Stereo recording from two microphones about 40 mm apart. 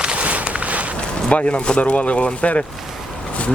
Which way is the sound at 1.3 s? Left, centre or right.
Left.